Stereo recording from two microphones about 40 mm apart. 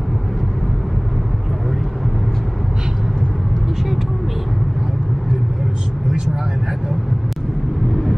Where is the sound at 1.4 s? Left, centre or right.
Centre.